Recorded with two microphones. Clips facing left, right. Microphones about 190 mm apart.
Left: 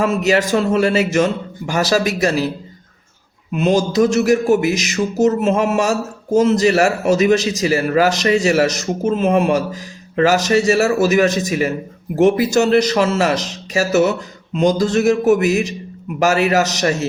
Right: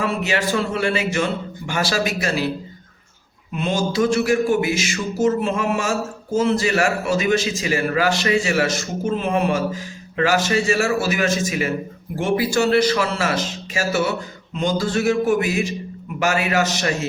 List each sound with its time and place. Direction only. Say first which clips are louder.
0.0 s speech: left 6 dB; 40° left (ahead or behind)
3.6 s speech: left 6 dB; 40° left (ahead or behind)